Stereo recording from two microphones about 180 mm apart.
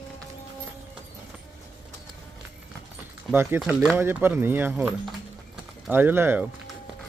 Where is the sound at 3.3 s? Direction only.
10° right (ahead or behind).